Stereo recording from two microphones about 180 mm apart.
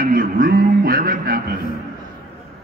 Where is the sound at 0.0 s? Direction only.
50° right (ahead or behind).